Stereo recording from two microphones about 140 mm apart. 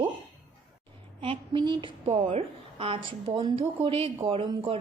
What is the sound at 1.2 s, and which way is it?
Speech, 35° right (ahead or behind).